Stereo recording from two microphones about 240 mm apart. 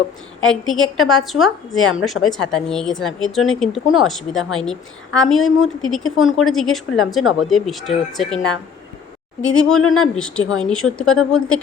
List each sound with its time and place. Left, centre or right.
0.4 s a woman's voice: centre
9.7 s speech: left
10.0 s a woman's voice: centre